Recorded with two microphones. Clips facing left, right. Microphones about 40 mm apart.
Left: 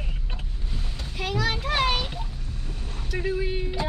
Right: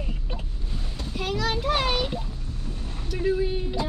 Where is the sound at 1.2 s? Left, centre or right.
Centre.